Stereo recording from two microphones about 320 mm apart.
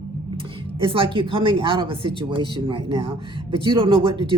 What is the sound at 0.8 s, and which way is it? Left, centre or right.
Speech, centre.